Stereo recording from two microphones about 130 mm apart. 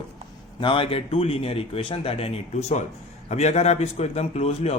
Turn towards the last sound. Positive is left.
turn(degrees=55)  # may be behind; listen again after turning